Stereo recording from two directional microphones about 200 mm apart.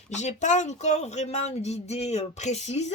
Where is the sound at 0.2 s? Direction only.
35° left (ahead or behind).